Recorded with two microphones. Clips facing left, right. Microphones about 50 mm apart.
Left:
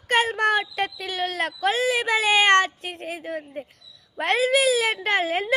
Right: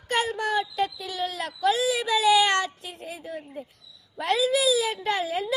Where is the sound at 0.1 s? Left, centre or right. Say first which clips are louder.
Left 5 dB; left.